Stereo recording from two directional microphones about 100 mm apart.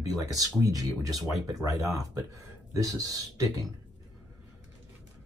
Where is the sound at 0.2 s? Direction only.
35° right (ahead or behind).